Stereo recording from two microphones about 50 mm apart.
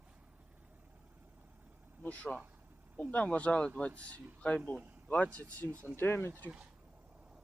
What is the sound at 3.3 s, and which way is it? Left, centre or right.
Speech, left.